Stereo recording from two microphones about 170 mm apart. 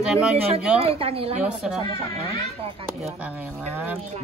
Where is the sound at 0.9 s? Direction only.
35° right (ahead or behind).